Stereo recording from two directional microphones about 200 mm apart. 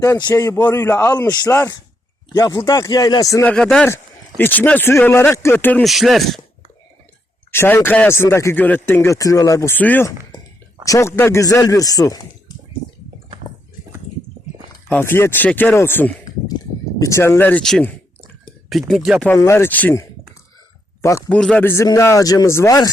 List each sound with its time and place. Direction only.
0.0 s speech: 20° left (ahead or behind)
3.5 s speech: 5° left (ahead or behind)
7.5 s speech: 10° left (ahead or behind)
14.8 s speech: 10° left (ahead or behind)
19.3 s speech: 15° left (ahead or behind)